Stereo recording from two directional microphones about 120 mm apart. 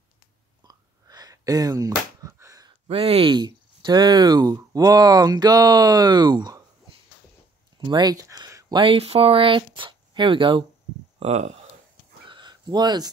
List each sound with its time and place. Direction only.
0.7 s a sound: 35° right (ahead or behind)
2.9 s speech: 55° right (ahead or behind); by 6.6 s 35° right (ahead or behind)
7.9 s speech: 35° right (ahead or behind)
8.7 s speech: 50° right (ahead or behind)
11.1 s speech: 65° right (ahead or behind)
12.3 s a sound: 40° right (ahead or behind)